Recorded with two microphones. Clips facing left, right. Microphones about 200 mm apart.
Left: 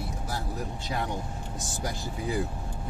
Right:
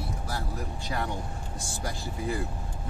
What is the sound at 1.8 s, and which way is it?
Speech, 20° left (ahead or behind).